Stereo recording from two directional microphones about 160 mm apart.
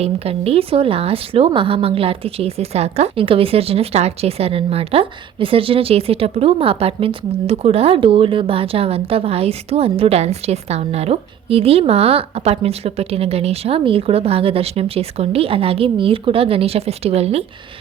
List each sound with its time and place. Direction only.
0.0 s speech: 40° right (ahead or behind)